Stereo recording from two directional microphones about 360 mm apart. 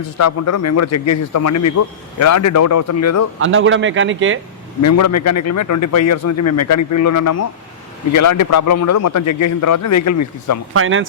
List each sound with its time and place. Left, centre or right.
0.2 s a man's voice: left
3.4 s a man's voice: right
4.8 s a man's voice: left
10.8 s a man's voice: right